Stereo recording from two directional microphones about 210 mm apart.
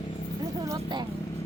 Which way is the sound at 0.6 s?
20° right (ahead or behind).